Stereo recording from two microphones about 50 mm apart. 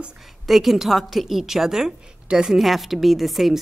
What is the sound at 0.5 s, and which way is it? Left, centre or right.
A woman's voice, centre.